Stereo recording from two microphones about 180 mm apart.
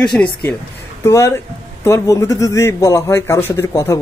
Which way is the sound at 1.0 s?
15° left (ahead or behind).